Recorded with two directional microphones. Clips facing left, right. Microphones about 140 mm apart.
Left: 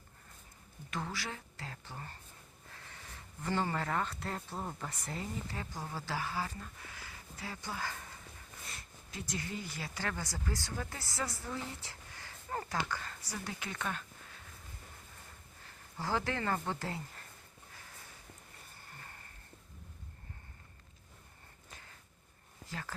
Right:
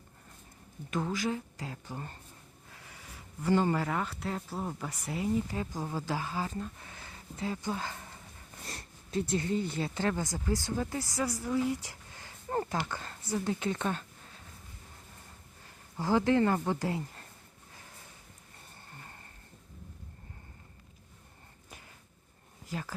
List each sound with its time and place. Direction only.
0.9 s speech: 20° right (ahead or behind)
3.4 s speech: 15° right (ahead or behind)
12.5 s a sound: 25° right (ahead or behind)
13.3 s speech: 25° right (ahead or behind)
16.0 s speech: 20° right (ahead or behind)